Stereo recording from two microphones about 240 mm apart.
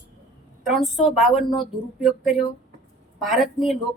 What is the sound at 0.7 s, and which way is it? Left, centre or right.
A woman's voice, centre.